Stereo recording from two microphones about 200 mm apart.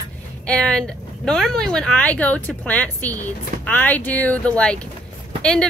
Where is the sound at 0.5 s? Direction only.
5° left (ahead or behind).